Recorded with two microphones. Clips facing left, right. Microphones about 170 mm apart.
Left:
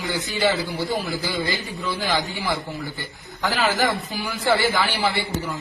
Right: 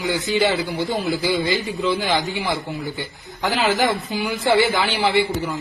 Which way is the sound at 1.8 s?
20° right (ahead or behind).